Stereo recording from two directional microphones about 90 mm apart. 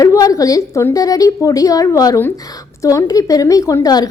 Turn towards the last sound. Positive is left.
turn(degrees=45)  # may be behind; listen again after turning